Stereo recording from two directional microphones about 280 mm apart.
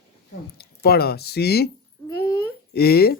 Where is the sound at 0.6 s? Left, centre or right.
Left.